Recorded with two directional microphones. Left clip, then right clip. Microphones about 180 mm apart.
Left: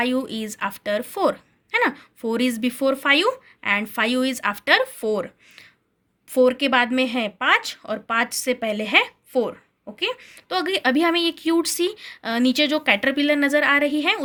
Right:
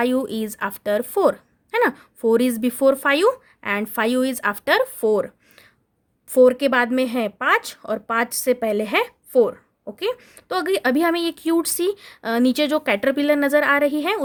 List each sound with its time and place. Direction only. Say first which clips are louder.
0.0 s a woman's voice: right 2 dB; 55° right (ahead or behind)
6.3 s a woman's voice: right 3 dB; 55° right (ahead or behind)